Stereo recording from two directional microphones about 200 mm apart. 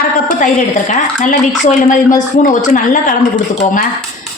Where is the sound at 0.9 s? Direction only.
40° left (ahead or behind).